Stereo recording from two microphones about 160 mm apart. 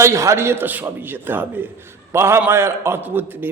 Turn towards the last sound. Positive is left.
turn(degrees=-10)  # may be behind; listen again after turning